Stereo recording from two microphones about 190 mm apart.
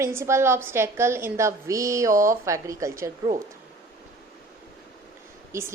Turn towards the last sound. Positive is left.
turn(degrees=-15)  # may be behind; listen again after turning